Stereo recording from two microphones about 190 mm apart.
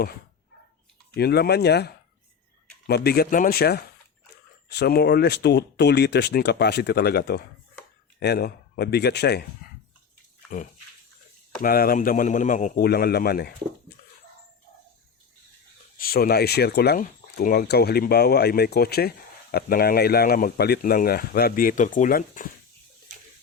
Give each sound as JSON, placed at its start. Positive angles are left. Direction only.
{"t": 1.1, "sound": "speech", "side_deg": 55}
{"t": 9.6, "sound": "a sound", "side_deg": 50}
{"t": 11.6, "sound": "a man's voice", "side_deg": 50}
{"t": 16.0, "sound": "speech", "side_deg": 50}